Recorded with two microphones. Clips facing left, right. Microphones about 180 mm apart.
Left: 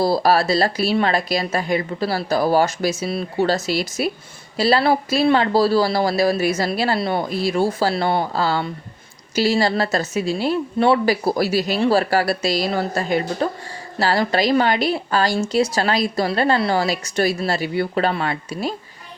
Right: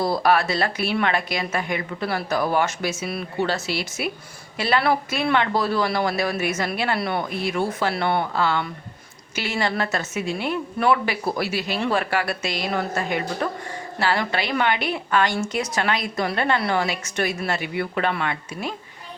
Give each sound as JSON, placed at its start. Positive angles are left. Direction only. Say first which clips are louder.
{"t": 0.0, "sound": "a woman's voice", "louder": "left 3 dB", "side_deg": 35}